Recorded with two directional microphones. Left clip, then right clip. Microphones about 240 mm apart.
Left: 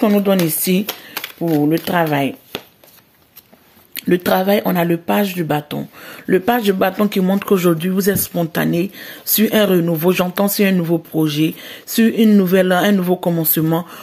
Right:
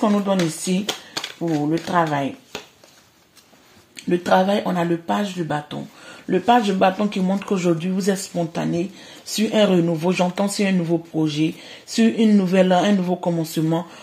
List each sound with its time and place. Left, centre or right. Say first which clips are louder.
0.0 s speech: left 5 dB; left
3.9 s speech: left 2 dB; left